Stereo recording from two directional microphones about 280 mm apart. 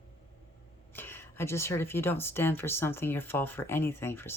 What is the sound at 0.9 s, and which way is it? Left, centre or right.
Speech, centre.